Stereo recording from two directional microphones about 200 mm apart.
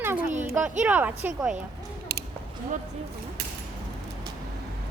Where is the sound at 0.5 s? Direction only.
10° right (ahead or behind).